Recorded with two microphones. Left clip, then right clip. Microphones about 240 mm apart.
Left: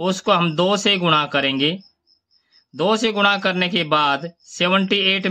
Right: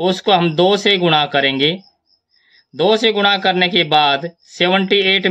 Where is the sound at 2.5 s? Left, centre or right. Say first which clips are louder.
Right 5 dB; left.